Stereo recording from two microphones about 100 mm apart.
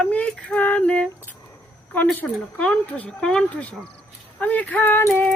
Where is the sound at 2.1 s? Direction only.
15° left (ahead or behind).